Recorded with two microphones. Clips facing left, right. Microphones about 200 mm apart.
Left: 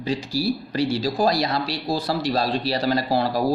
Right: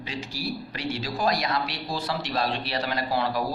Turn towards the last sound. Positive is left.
turn(degrees=35)  # may be behind; listen again after turning